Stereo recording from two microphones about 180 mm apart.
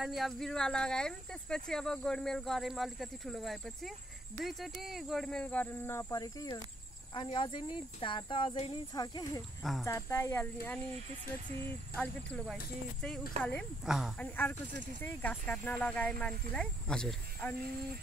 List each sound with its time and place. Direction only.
0.0 s speech: centre (ahead or behind); by 9.4 s 20° left (ahead or behind)
9.6 s speech: centre (ahead or behind)
9.8 s speech: 15° left (ahead or behind)
11.9 s speech: 5° left (ahead or behind)
13.4 s speech: 35° right (ahead or behind)
13.8 s speech: 5° right (ahead or behind)
14.1 s speech: 10° left (ahead or behind)